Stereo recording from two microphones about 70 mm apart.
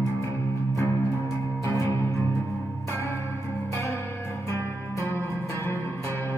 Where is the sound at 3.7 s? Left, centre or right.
Left.